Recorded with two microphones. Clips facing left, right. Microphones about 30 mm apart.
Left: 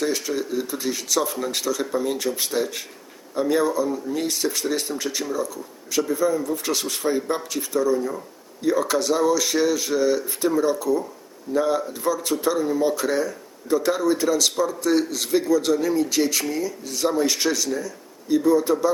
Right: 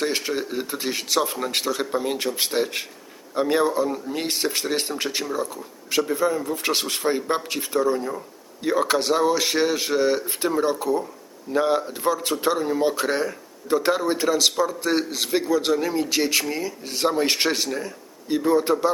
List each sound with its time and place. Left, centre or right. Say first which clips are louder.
0.0 s speech: even; right
12.5 s a man's voice: left 1 dB; right